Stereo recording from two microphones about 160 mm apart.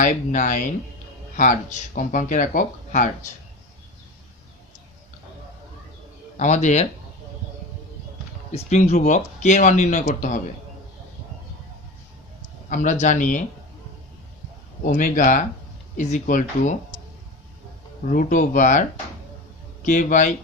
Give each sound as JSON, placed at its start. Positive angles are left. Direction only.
{"t": 0.0, "sound": "speech", "side_deg": 55}
{"t": 6.3, "sound": "speech", "side_deg": 45}
{"t": 8.5, "sound": "speech", "side_deg": 45}
{"t": 12.6, "sound": "speech", "side_deg": 50}
{"t": 14.8, "sound": "speech", "side_deg": 55}
{"t": 18.1, "sound": "speech", "side_deg": 55}